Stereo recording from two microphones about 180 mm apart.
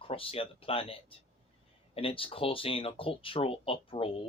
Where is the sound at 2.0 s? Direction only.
30° left (ahead or behind).